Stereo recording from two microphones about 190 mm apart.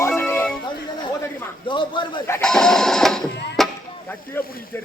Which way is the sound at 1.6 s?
25° left (ahead or behind).